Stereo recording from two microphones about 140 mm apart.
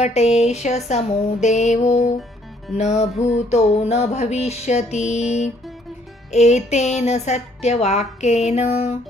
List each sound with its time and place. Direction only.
0.0 s a woman's voice: 50° left (ahead or behind)